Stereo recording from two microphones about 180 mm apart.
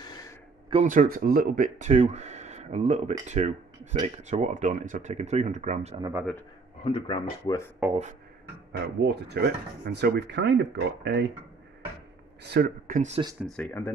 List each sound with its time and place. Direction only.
0.8 s speech: 50° right (ahead or behind)
6.8 s speech: 30° left (ahead or behind)
7.8 s speech: 10° right (ahead or behind)
8.7 s speech: 70° right (ahead or behind)
12.4 s speech: 70° right (ahead or behind)
12.9 s speech: 40° right (ahead or behind)
13.5 s speech: 5° left (ahead or behind)